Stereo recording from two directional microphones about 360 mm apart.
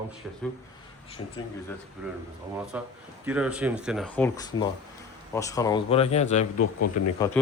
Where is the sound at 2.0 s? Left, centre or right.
Centre.